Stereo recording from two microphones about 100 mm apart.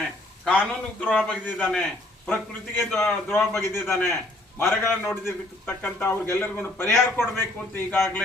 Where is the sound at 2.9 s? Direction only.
20° left (ahead or behind).